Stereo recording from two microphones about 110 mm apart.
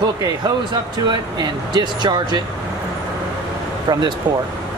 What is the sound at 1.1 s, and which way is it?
Speech, 40° right (ahead or behind).